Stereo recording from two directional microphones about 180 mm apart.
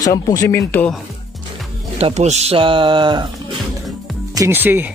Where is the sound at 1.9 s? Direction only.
35° right (ahead or behind).